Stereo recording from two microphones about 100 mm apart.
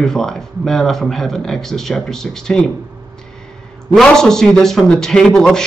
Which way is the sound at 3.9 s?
5° left (ahead or behind).